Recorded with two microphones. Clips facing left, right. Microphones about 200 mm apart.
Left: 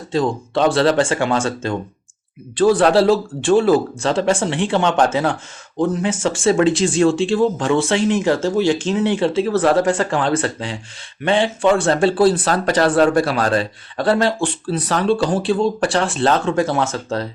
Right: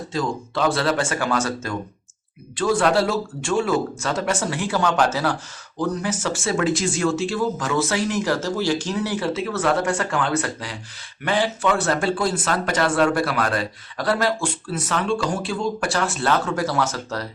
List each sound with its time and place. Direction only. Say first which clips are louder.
0.1 s speech: left 7 dB; 30° left (ahead or behind)